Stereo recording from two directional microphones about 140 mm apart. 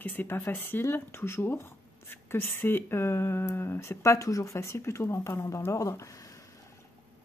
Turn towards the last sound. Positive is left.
turn(degrees=25)  # may be behind; listen again after turning